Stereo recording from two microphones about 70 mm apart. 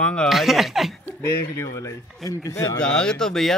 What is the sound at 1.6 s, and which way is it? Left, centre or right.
Speech, left.